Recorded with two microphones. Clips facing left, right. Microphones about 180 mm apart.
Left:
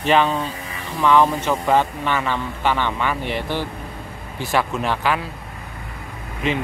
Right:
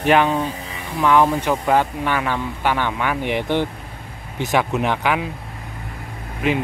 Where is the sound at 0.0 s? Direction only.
10° right (ahead or behind).